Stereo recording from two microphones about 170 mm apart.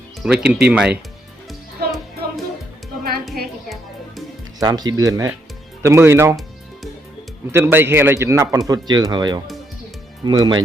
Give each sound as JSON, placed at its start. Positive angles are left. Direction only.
{"t": 0.2, "sound": "a man's voice", "side_deg": -5}
{"t": 1.5, "sound": "music", "side_deg": 0}
{"t": 4.6, "sound": "a man's voice", "side_deg": -25}
{"t": 7.5, "sound": "a man's voice", "side_deg": -15}